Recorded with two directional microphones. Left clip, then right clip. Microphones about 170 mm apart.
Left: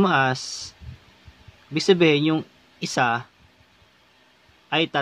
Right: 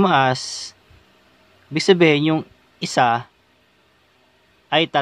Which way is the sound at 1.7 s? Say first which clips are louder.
Right 3 dB; 35° right (ahead or behind).